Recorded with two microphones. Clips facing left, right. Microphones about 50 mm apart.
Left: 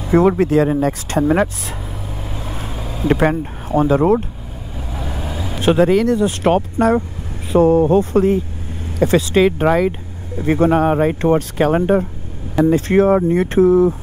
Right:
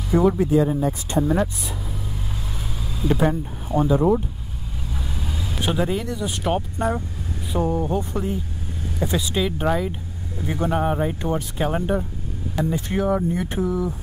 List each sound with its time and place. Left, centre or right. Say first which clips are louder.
0.2 s speech: left 3 dB; left
2.3 s vehicle: left 5 dB; left
3.1 s speech: left 5 dB; left
4.9 s vehicle: left 6 dB; left
5.6 s speech: left 11 dB; left
10.3 s speech: left 10 dB; left
10.7 s speech: left 8 dB; left
12.6 s speech: left 10 dB; left